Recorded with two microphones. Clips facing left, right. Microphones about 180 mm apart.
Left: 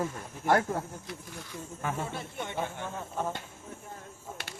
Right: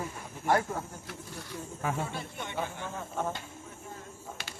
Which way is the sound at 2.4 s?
55° left (ahead or behind).